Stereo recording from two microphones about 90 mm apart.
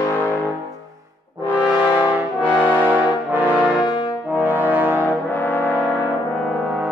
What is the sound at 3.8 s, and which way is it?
Brass instrument, 55° left (ahead or behind).